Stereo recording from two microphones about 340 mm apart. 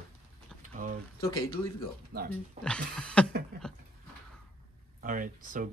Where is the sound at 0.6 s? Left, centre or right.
Right.